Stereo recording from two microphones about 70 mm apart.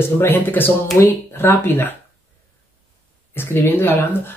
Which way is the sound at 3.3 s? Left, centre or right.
Left.